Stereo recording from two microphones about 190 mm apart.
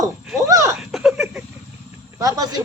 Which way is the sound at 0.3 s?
15° right (ahead or behind).